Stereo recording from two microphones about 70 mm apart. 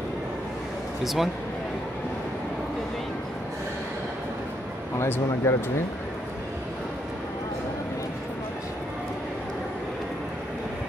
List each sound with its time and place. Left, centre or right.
1.0 s speech: centre
4.9 s speech: left